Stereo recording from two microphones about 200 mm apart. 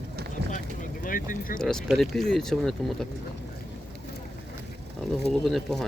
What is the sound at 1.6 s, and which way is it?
Speech, 5° left (ahead or behind).